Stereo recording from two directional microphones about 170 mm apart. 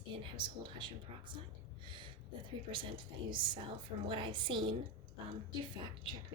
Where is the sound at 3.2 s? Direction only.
30° right (ahead or behind).